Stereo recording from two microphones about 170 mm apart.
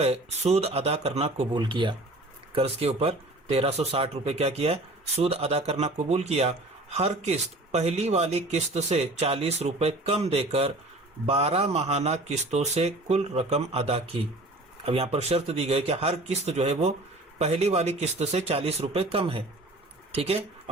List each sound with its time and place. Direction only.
0.0 s speech: 35° right (ahead or behind)